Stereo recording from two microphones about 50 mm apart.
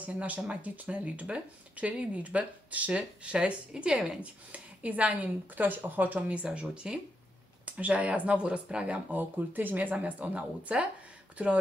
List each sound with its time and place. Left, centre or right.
0.0 s speech: right
4.2 s speech: right
6.2 s speech: right
9.1 s speech: right